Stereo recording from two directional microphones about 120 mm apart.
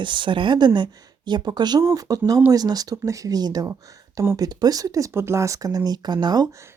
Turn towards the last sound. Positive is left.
turn(degrees=-25)  # may be behind; listen again after turning